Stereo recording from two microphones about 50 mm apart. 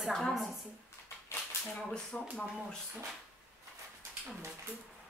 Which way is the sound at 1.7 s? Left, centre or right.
Centre.